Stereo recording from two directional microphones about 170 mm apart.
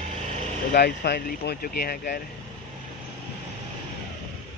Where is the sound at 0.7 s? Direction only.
70° left (ahead or behind).